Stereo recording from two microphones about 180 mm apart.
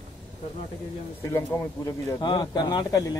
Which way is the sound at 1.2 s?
15° left (ahead or behind).